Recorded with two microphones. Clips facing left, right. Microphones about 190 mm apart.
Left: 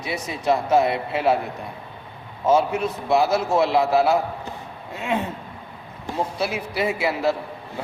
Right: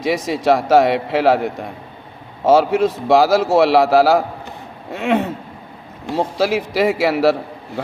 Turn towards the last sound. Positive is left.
turn(degrees=-80)